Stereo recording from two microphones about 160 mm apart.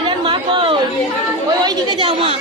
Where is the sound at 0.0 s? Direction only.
30° right (ahead or behind).